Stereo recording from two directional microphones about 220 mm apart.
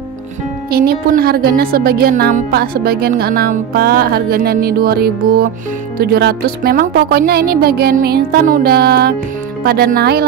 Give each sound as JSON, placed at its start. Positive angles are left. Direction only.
{"t": 0.7, "sound": "a woman's voice", "side_deg": -45}